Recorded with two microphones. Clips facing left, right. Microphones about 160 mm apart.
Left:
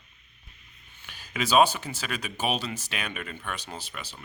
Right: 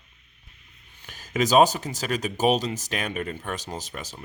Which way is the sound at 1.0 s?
45° right (ahead or behind).